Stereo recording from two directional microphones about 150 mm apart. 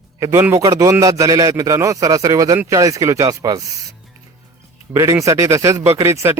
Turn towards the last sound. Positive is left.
turn(degrees=-20)  # may be behind; listen again after turning